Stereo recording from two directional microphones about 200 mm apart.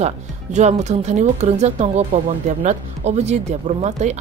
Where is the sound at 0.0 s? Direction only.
35° right (ahead or behind).